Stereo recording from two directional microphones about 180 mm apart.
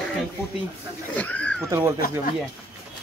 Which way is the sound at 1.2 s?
10° left (ahead or behind).